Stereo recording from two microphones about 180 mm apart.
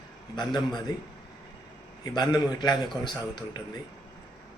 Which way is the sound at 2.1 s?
20° left (ahead or behind).